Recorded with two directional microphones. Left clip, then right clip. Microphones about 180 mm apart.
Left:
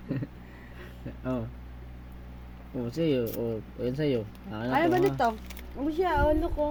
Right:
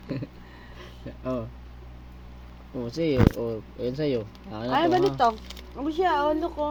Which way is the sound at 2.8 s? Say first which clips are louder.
Right 4 dB; 15° left (ahead or behind).